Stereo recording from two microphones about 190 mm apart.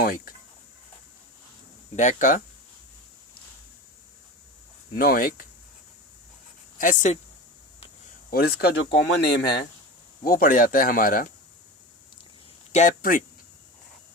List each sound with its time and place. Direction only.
0.0 s speech: 50° left (ahead or behind)
2.0 s speech: 40° left (ahead or behind)
4.9 s speech: 50° left (ahead or behind)
6.7 s speech: 40° left (ahead or behind)
8.3 s speech: 55° left (ahead or behind)
10.2 s speech: 50° left (ahead or behind)
12.7 s speech: 45° left (ahead or behind)